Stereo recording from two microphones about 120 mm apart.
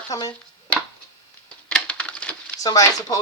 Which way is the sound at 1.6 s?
10° left (ahead or behind).